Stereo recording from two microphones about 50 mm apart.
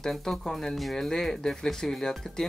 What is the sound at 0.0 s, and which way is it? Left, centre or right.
Speech, centre.